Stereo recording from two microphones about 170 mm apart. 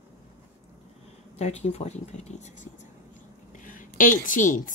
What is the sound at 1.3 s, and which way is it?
A woman's voice, 40° left (ahead or behind).